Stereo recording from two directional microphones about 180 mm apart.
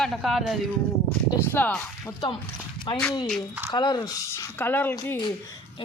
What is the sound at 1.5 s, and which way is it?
Speech, 10° left (ahead or behind).